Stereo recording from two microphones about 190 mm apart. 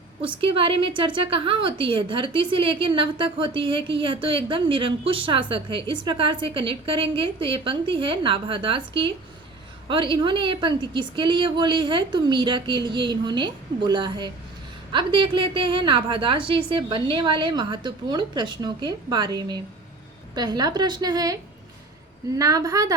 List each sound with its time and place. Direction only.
0.4 s a woman's voice: 30° right (ahead or behind)
22.4 s a woman's voice: 20° right (ahead or behind)